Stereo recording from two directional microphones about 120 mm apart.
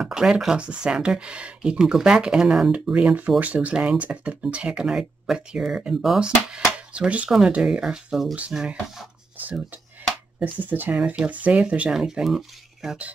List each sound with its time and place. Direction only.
0.0 s speech: 5° right (ahead or behind)
10.7 s speech: 15° right (ahead or behind)